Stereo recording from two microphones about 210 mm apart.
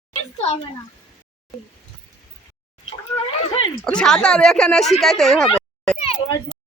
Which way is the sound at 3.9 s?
5° left (ahead or behind).